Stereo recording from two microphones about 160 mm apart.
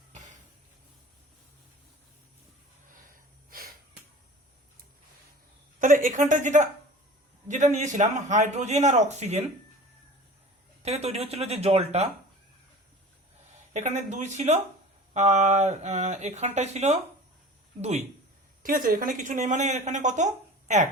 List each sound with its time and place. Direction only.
0.1 s a sound: 50° right (ahead or behind)
5.8 s speech: 55° right (ahead or behind)
10.8 s speech: 40° right (ahead or behind)
13.7 s speech: 45° right (ahead or behind)
18.6 s speech: 60° right (ahead or behind)